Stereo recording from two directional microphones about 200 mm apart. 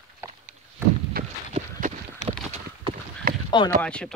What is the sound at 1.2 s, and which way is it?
Clip-clop, 50° right (ahead or behind).